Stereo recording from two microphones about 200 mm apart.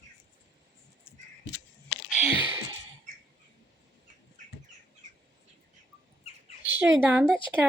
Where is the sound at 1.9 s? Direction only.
60° left (ahead or behind).